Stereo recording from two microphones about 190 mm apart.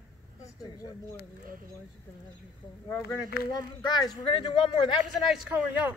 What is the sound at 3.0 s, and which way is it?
Speech, 55° left (ahead or behind).